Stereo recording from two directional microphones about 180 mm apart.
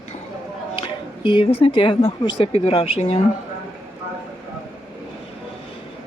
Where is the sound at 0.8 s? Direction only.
25° left (ahead or behind).